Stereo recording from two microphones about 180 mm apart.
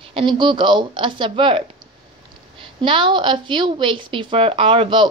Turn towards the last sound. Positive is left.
turn(degrees=-30)  # may be behind; listen again after turning